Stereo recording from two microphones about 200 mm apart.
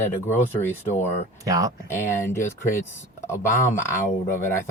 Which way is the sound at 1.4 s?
15° right (ahead or behind).